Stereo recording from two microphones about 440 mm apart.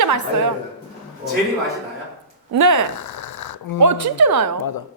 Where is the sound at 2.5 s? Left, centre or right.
Right.